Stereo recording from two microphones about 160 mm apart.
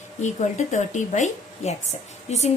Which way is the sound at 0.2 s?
50° left (ahead or behind).